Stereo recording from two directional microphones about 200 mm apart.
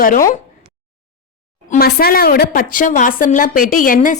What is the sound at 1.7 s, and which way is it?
A woman's voice, 50° left (ahead or behind).